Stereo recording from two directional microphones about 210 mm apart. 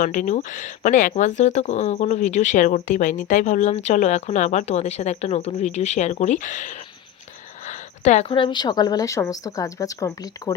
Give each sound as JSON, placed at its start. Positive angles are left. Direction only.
{"t": 0.0, "sound": "speech", "side_deg": 35}
{"t": 7.7, "sound": "a sound", "side_deg": 35}
{"t": 8.3, "sound": "speech", "side_deg": 20}